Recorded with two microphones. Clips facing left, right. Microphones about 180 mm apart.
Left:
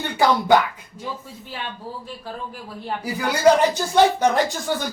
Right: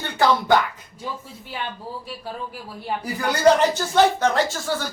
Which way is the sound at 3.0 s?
10° left (ahead or behind).